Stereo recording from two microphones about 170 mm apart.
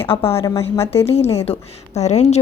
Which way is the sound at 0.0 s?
35° left (ahead or behind).